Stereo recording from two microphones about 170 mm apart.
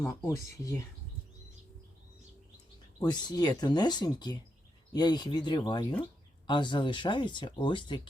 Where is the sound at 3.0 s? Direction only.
25° left (ahead or behind).